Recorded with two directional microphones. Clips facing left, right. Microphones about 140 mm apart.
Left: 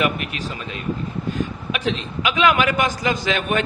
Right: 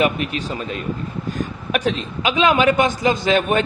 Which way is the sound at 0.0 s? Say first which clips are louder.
Right 3 dB; 35° right (ahead or behind).